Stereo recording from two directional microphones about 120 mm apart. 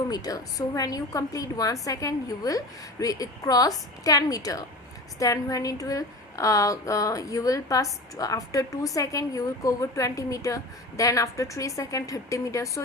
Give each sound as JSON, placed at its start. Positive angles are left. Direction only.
{"t": 0.1, "sound": "a woman's voice", "side_deg": 30}